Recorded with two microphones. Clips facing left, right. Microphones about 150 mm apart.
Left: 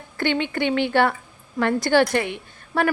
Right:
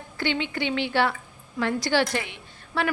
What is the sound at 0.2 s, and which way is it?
A woman's voice, 55° left (ahead or behind).